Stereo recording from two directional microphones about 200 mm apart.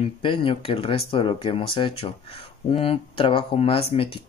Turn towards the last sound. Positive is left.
turn(degrees=30)  # may be behind; listen again after turning